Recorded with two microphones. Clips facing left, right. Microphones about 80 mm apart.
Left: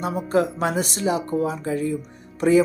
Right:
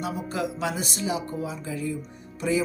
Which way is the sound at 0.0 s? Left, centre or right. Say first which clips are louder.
Left 8 dB; left.